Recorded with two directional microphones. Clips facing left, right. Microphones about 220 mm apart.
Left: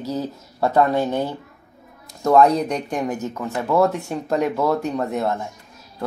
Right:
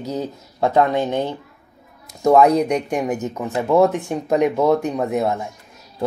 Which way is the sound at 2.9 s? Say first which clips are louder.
Right 2 dB; 20° right (ahead or behind).